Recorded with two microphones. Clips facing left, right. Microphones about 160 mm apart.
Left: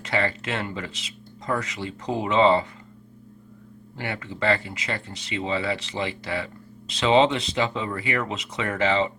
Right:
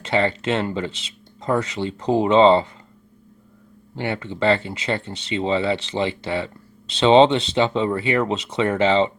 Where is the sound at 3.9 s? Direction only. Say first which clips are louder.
Right 6 dB; 25° right (ahead or behind).